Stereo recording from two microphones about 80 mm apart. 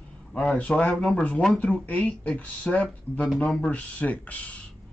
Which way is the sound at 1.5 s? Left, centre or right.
Centre.